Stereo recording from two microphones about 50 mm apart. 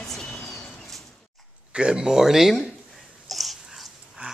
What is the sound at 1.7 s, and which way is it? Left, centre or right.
Speech, centre.